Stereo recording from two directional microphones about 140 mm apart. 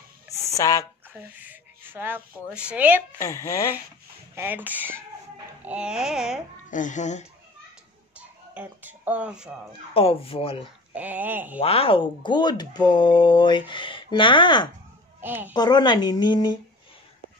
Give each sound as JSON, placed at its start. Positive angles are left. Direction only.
{"t": 0.6, "sound": "speech", "side_deg": 25}
{"t": 1.1, "sound": "a woman's voice", "side_deg": -10}
{"t": 3.2, "sound": "speech", "side_deg": 20}
{"t": 4.4, "sound": "a woman's voice", "side_deg": -15}
{"t": 5.7, "sound": "a sound", "side_deg": -5}
{"t": 6.7, "sound": "speech", "side_deg": 65}
{"t": 8.2, "sound": "speech", "side_deg": -10}
{"t": 9.7, "sound": "speech", "side_deg": 40}
{"t": 11.0, "sound": "a woman's voice", "side_deg": -10}
{"t": 11.6, "sound": "speech", "side_deg": 45}
{"t": 15.1, "sound": "a woman's voice", "side_deg": -15}
{"t": 15.5, "sound": "speech", "side_deg": 30}